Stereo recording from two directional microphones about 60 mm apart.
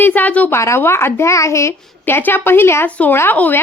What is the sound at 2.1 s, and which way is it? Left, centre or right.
Speech, left.